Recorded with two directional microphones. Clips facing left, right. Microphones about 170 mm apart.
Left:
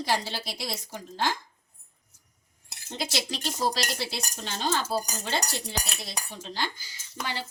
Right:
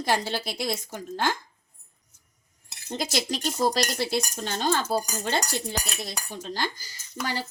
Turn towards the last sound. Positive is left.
turn(degrees=-40)  # may be behind; listen again after turning